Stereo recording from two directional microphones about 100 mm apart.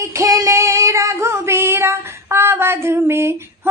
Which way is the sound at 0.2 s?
35° right (ahead or behind).